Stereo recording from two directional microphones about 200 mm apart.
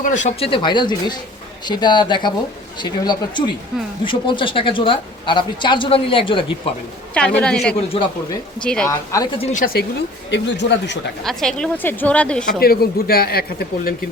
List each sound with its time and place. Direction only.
0.0 s speech: 35° left (ahead or behind)
7.1 s a woman's voice: 5° left (ahead or behind)
7.9 s speech: 25° left (ahead or behind)
8.6 s a woman's voice: 5° left (ahead or behind)
8.9 s a woman's voice: 15° left (ahead or behind)
9.4 s a woman's voice: 40° left (ahead or behind)
10.3 s speech: 60° left (ahead or behind)
11.2 s a woman's voice: centre (ahead or behind)
12.5 s speech: 50° left (ahead or behind)